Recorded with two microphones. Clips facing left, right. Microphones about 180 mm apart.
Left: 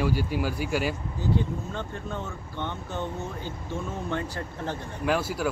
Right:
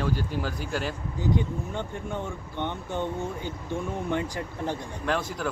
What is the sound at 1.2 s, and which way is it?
Speech, 15° right (ahead or behind).